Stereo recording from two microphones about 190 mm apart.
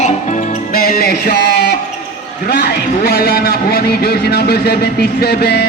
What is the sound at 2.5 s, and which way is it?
A man's voice, 55° left (ahead or behind).